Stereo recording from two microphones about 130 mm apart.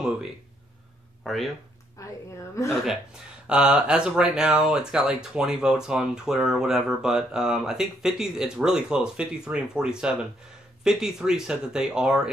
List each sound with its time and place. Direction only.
1.2 s speech: centre (ahead or behind)
2.0 s a sound: 25° left (ahead or behind)
3.4 s speech: 5° right (ahead or behind)